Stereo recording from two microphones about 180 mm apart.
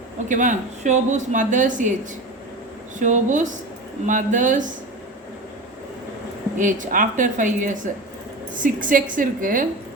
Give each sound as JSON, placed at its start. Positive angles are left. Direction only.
{"t": 0.3, "sound": "speech", "side_deg": -45}
{"t": 3.0, "sound": "speech", "side_deg": -45}
{"t": 6.6, "sound": "speech", "side_deg": -45}